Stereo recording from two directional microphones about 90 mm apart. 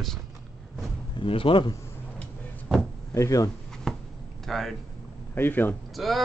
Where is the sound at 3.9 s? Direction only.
5° left (ahead or behind).